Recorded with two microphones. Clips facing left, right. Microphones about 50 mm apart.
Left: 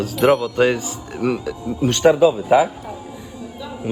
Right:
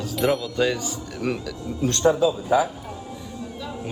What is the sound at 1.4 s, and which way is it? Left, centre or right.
Speech, left.